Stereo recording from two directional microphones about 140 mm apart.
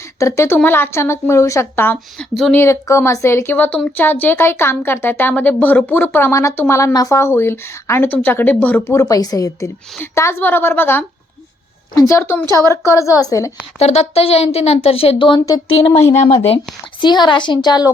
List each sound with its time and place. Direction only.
0.2 s speech: 20° left (ahead or behind)
2.1 s speech: centre (ahead or behind)
2.6 s speech: 20° left (ahead or behind)
13.7 s speech: 50° left (ahead or behind)
15.4 s speech: 25° left (ahead or behind)
16.1 s speech: 55° left (ahead or behind)
17.0 s a woman's voice: 30° left (ahead or behind)